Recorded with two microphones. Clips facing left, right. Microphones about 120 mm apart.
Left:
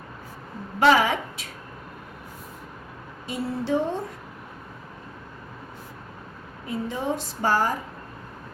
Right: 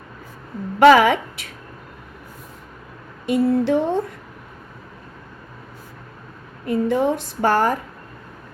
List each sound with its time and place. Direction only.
0.8 s a woman's voice: 65° right (ahead or behind)
3.2 s a woman's voice: 65° right (ahead or behind)
6.7 s a woman's voice: 60° right (ahead or behind)